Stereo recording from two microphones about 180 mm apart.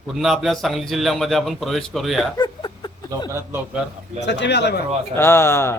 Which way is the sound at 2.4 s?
25° left (ahead or behind).